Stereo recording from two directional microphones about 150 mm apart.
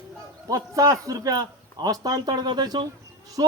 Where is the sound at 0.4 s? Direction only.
20° right (ahead or behind).